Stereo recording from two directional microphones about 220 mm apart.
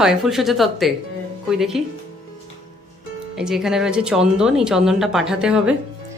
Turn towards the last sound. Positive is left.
turn(degrees=-5)  # may be behind; listen again after turning